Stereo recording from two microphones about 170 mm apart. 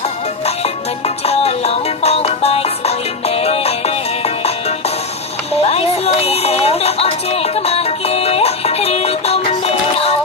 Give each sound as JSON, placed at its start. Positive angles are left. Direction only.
{"t": 0.4, "sound": "music", "side_deg": 40}
{"t": 5.6, "sound": "music", "side_deg": 35}